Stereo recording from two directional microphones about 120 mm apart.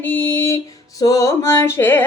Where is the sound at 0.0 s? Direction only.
15° left (ahead or behind).